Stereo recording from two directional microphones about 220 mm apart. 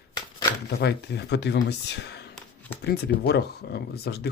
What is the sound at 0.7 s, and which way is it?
Speech, 50° left (ahead or behind).